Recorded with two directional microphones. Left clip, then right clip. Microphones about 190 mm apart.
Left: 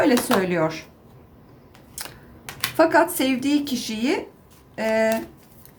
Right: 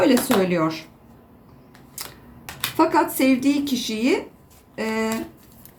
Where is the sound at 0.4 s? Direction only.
15° left (ahead or behind).